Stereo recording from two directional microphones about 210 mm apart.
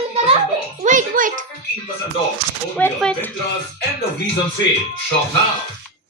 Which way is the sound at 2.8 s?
10° left (ahead or behind).